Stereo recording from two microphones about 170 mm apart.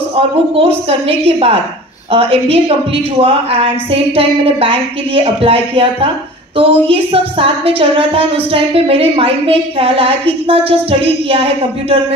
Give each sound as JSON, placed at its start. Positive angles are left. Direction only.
{"t": 0.6, "sound": "a woman's voice", "side_deg": -35}